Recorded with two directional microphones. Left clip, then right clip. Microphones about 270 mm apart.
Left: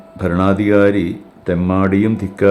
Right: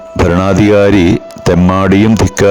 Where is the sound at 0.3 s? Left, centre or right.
Right.